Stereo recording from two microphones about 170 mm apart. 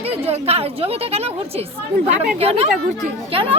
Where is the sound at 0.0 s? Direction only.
35° right (ahead or behind).